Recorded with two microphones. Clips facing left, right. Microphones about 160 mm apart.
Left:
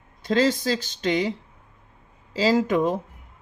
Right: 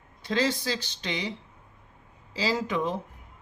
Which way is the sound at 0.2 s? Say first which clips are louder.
Left 6 dB; 45° left (ahead or behind).